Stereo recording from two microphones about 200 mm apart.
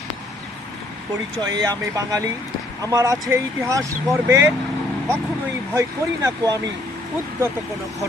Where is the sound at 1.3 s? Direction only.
20° right (ahead or behind).